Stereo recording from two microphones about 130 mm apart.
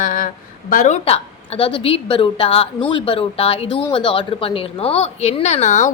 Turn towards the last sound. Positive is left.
turn(degrees=65)  # may be behind; listen again after turning